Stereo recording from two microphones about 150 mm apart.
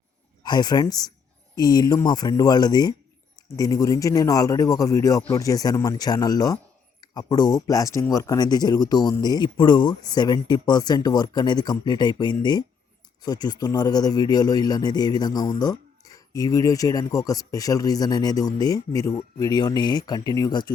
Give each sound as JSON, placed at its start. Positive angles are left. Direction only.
{"t": 0.4, "sound": "speech", "side_deg": 30}